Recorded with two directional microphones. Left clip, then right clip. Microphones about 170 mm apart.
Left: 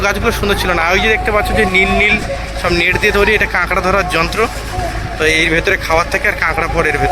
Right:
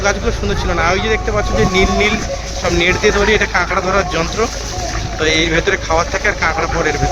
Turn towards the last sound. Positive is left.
turn(degrees=5)  # may be behind; listen again after turning